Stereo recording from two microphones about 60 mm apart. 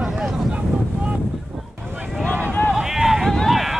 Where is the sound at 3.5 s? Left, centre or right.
Centre.